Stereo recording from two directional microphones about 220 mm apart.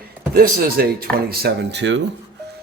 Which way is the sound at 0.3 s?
45° right (ahead or behind).